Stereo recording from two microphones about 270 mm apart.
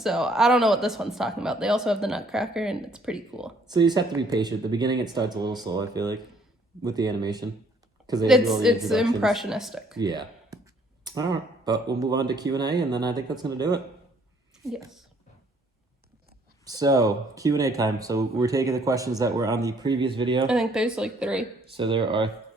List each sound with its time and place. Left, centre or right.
0.0 s speech: centre
3.7 s speech: centre
8.3 s speech: centre
10.0 s speech: centre
16.6 s speech: centre
20.5 s speech: centre
21.8 s speech: centre